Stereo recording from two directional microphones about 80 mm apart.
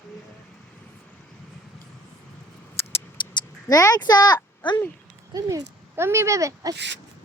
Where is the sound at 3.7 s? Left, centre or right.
Left.